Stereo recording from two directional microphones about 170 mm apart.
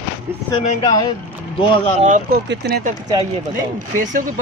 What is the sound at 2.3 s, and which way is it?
Speech, 80° right.